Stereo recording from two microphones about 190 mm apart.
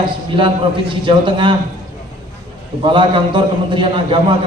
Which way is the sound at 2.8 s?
25° right (ahead or behind).